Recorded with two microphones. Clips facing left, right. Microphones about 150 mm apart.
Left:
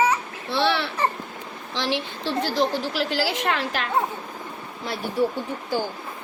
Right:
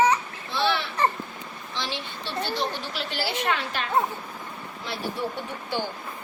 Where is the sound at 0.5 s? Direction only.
75° left (ahead or behind).